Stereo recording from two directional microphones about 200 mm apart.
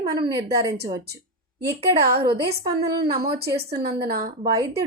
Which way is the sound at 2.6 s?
20° right (ahead or behind).